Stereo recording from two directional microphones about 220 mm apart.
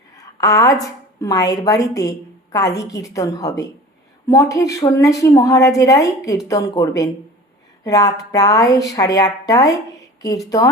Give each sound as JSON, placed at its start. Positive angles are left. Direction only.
{"t": 0.1, "sound": "a woman's voice", "side_deg": 15}